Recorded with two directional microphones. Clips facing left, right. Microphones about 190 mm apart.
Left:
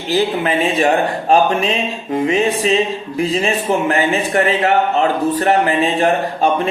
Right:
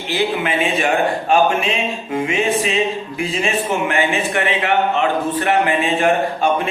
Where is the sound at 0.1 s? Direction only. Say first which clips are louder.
Left 3 dB; 35° left (ahead or behind).